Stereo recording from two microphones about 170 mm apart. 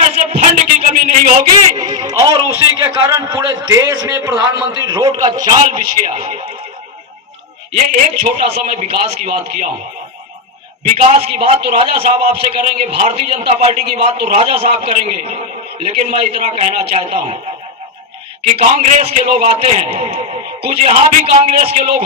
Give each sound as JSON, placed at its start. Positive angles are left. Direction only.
{"t": 0.3, "sound": "music", "side_deg": -40}
{"t": 1.7, "sound": "a man's voice", "side_deg": -25}
{"t": 8.2, "sound": "a man's voice", "side_deg": -40}
{"t": 10.9, "sound": "a man's voice", "side_deg": -40}
{"t": 18.5, "sound": "a man's voice", "side_deg": -40}